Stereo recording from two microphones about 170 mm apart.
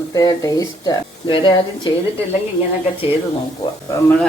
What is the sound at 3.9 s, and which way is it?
Speech, 10° left (ahead or behind).